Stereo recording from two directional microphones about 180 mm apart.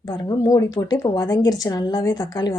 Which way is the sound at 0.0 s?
20° left (ahead or behind).